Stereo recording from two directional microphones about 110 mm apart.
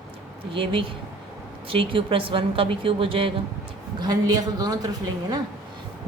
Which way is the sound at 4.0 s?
40° right (ahead or behind).